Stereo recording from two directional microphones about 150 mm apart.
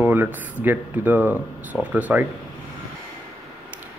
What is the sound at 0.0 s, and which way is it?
Speech, 10° right (ahead or behind).